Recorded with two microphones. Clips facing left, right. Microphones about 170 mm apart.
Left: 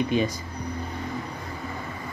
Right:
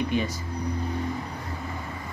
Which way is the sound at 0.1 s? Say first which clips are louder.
Left 3 dB; 20° left (ahead or behind).